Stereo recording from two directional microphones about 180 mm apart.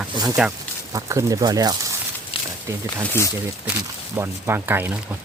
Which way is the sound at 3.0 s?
10° left (ahead or behind).